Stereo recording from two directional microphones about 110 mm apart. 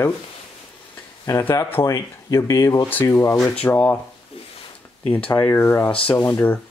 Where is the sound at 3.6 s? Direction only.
15° left (ahead or behind).